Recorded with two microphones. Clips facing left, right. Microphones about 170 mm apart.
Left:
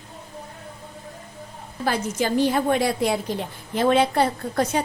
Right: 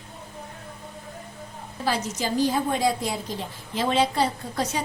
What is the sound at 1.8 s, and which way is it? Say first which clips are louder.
A woman's voice: left 3 dB; 55° left (ahead or behind).